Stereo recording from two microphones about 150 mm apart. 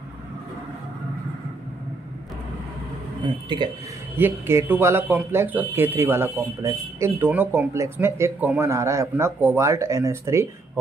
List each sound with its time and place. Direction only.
3.4 s speech: 30° right (ahead or behind)
4.2 s speech: 15° right (ahead or behind)